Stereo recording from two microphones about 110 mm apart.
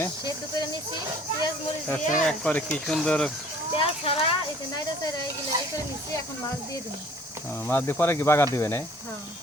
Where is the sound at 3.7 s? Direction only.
60° left (ahead or behind).